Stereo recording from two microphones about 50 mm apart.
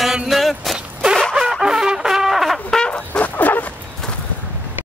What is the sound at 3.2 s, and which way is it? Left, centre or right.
Bow-wow, left.